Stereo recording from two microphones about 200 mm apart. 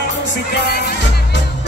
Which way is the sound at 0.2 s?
55° left (ahead or behind).